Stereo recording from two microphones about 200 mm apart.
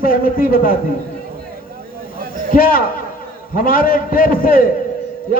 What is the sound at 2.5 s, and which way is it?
A man's voice, 45° left (ahead or behind).